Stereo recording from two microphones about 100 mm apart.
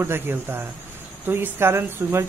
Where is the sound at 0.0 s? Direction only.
25° right (ahead or behind).